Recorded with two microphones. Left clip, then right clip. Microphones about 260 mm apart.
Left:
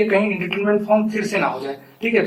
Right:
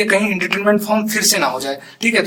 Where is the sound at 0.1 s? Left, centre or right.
Right.